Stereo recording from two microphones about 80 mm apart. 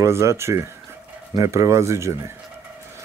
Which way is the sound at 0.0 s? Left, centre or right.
Right.